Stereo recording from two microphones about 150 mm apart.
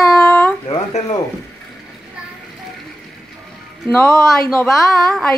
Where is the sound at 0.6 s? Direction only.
35° left (ahead or behind).